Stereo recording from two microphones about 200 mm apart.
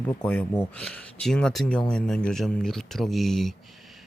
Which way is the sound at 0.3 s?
10° left (ahead or behind).